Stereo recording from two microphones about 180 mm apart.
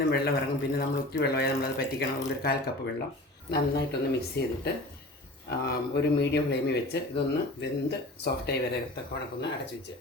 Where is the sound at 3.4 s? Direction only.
65° left (ahead or behind).